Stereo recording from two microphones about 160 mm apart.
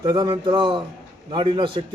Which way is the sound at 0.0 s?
30° right (ahead or behind).